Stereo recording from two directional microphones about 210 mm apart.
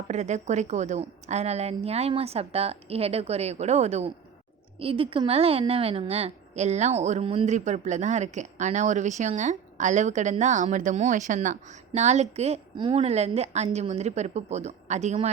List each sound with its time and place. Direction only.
0.1 s a woman's voice: 35° right (ahead or behind)